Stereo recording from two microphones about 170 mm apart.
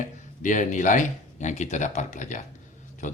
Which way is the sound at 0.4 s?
45° left (ahead or behind).